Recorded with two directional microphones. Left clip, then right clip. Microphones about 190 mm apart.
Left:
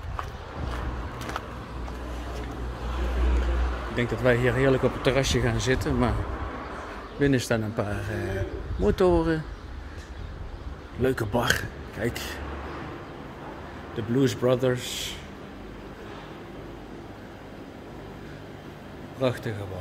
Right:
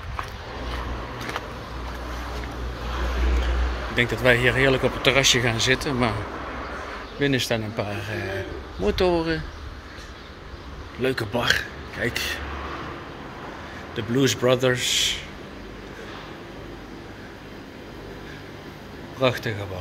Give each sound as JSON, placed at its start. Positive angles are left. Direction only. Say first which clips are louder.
{"t": 3.9, "sound": "speech", "louder": "right 5 dB", "side_deg": 15}
{"t": 7.2, "sound": "speech", "louder": "right 1 dB", "side_deg": 30}
{"t": 11.0, "sound": "speech", "louder": "right 1 dB", "side_deg": 30}
{"t": 13.9, "sound": "speech", "louder": "right 3 dB", "side_deg": 20}
{"t": 19.1, "sound": "speech", "louder": "right 5 dB", "side_deg": 10}